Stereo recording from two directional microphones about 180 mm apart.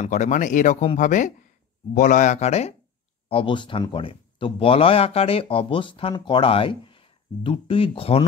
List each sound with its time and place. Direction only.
0.0 s speech: 45° left (ahead or behind)